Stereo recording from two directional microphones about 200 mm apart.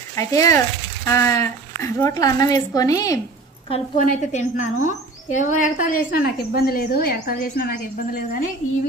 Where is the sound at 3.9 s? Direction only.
40° left (ahead or behind).